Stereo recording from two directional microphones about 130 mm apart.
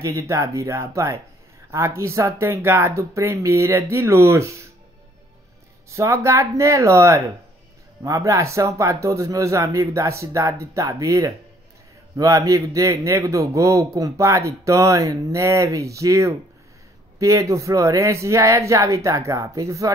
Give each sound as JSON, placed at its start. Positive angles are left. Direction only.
{"t": 0.0, "sound": "a man's voice", "side_deg": -25}
{"t": 5.9, "sound": "a man's voice", "side_deg": -25}